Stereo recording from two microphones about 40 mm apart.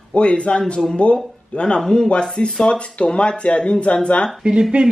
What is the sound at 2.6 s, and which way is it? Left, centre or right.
Speech, left.